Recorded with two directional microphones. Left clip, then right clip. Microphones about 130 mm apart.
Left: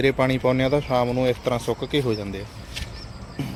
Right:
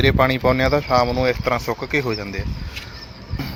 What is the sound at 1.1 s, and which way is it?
Speech, 20° left (ahead or behind).